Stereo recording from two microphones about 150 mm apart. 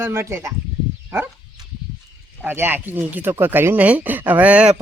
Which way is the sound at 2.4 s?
15° right (ahead or behind).